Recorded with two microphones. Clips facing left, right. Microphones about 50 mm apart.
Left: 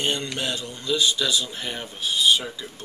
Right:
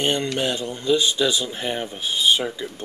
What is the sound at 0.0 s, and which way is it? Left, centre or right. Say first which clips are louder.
Speech: right 4 dB; right.